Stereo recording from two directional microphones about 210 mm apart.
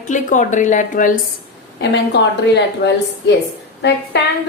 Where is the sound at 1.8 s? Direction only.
55° left (ahead or behind).